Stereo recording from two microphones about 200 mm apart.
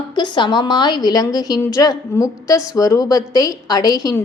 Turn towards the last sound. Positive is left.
turn(degrees=20)  # may be behind; listen again after turning